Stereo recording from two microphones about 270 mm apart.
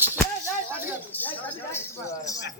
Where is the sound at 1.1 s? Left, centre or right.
Centre.